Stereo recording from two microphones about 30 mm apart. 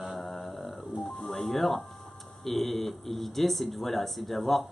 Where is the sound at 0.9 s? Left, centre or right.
Right.